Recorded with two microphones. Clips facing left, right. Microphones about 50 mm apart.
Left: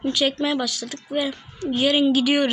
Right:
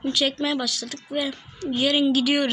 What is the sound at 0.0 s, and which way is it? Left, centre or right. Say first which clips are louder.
A woman's voice: left 2 dB; centre.